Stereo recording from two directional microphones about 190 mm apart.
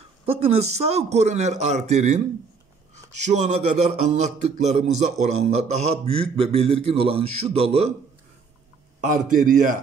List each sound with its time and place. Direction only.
0.3 s a man's voice: 35° right (ahead or behind)
3.3 s a man's voice: 40° right (ahead or behind)
9.0 s a man's voice: 45° right (ahead or behind)